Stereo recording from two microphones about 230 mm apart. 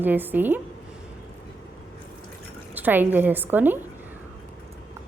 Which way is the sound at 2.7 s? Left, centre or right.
Centre.